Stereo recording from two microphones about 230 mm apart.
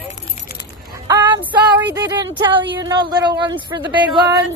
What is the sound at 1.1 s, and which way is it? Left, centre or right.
Speech, centre.